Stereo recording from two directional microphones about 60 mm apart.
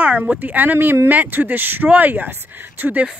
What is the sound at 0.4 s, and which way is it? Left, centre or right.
Speech, right.